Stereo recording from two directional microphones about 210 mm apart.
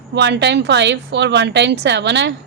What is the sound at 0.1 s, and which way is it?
A woman's voice, 55° right (ahead or behind).